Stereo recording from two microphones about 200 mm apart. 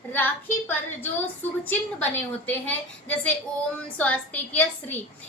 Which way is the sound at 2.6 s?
5° left (ahead or behind).